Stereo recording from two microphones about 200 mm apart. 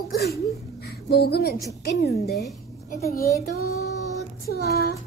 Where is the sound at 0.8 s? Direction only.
55° left (ahead or behind).